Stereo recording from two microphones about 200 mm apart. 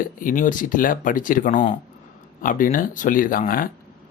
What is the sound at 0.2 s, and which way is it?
Speech, 40° left (ahead or behind).